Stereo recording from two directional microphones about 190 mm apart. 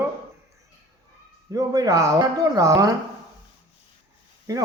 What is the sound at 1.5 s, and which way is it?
Speech, 20° right (ahead or behind).